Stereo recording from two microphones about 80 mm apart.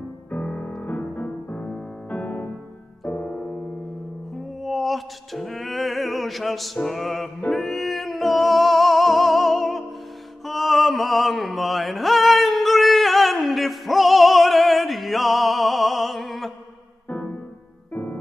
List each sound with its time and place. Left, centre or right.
0.3 s music: centre
3.1 s piano: centre
4.4 s music: centre
17.9 s piano: left